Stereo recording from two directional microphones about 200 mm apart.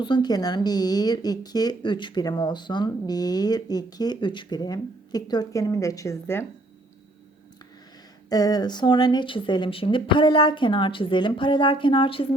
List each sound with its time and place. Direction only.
0.0 s speech: 20° left (ahead or behind)
8.3 s speech: 20° left (ahead or behind)